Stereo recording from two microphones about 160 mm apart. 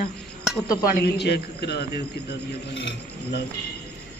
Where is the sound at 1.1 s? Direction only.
90° left.